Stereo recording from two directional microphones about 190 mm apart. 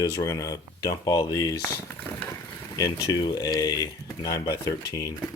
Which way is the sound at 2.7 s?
20° left (ahead or behind).